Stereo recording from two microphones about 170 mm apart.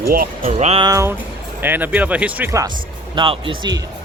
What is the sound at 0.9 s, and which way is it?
Speech, 15° right (ahead or behind).